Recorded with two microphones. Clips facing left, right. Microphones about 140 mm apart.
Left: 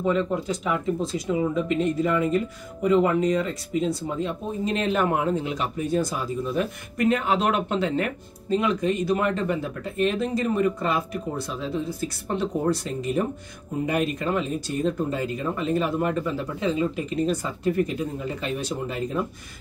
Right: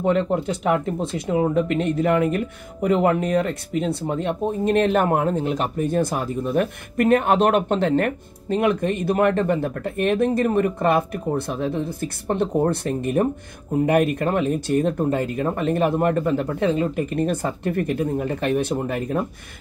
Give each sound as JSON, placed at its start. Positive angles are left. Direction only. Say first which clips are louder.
{"t": 0.0, "sound": "speech", "louder": "right 4 dB", "side_deg": -65}